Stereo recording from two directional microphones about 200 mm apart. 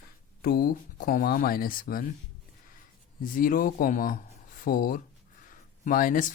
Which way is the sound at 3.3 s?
45° left (ahead or behind).